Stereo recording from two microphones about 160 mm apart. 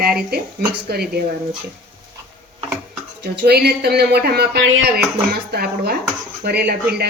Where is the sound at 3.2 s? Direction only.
90° right.